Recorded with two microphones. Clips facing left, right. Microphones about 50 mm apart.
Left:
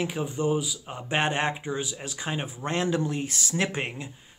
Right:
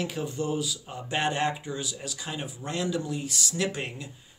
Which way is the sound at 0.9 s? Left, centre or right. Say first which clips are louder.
Left 3 dB; left.